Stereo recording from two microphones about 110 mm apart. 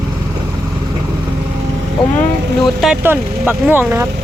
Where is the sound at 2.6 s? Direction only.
Centre (ahead or behind).